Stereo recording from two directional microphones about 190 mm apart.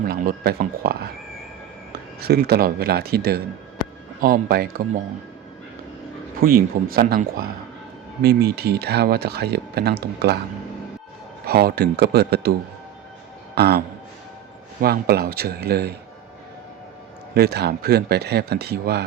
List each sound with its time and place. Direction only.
0.0 s speech: 50° right (ahead or behind)
2.2 s speech: 55° right (ahead or behind)
6.4 s speech: 50° right (ahead or behind)
11.4 s speech: 55° right (ahead or behind)
13.6 s speech: 55° right (ahead or behind)
17.3 s speech: 60° right (ahead or behind)